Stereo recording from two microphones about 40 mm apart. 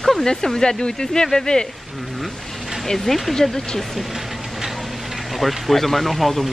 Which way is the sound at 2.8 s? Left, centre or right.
Centre.